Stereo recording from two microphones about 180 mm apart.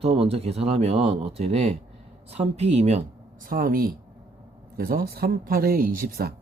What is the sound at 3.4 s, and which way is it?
Speech, 50° right (ahead or behind).